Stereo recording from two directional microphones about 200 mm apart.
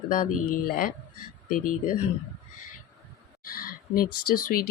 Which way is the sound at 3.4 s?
45° left (ahead or behind).